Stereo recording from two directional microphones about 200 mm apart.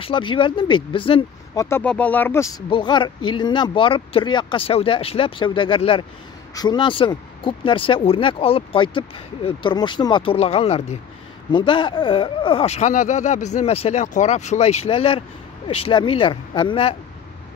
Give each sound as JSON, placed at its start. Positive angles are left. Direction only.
{"t": 0.0, "sound": "speech", "side_deg": 25}